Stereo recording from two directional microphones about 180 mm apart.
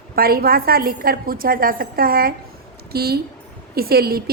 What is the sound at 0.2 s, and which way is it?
A woman's voice, 55° right (ahead or behind).